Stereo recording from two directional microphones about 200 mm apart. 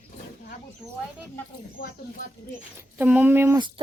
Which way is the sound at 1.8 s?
45° left (ahead or behind).